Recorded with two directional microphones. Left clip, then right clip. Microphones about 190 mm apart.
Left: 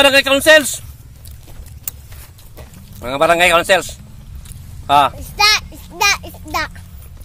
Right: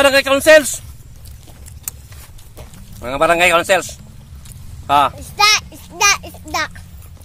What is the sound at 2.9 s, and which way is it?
Speech, 25° left (ahead or behind).